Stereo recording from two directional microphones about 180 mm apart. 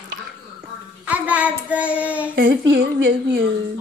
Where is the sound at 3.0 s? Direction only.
65° right (ahead or behind).